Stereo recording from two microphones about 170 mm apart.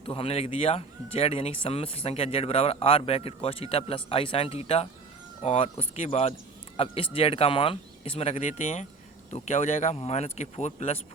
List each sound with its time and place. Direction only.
0.0 s speech: 30° left (ahead or behind)